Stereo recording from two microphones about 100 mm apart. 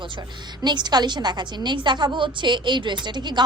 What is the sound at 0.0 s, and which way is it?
A woman's voice, 50° right (ahead or behind).